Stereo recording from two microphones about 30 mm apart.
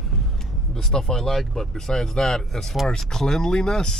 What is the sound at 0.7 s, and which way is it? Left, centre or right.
Speech, centre.